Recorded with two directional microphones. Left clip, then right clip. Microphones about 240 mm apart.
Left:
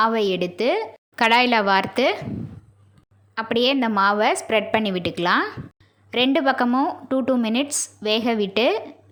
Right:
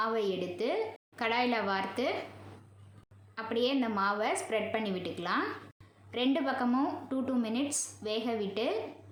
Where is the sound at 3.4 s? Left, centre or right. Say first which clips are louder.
Left 11 dB; left.